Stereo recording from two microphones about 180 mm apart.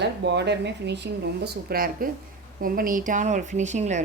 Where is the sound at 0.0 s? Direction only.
70° right (ahead or behind).